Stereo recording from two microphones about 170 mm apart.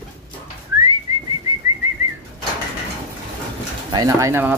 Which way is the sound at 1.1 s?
20° right (ahead or behind).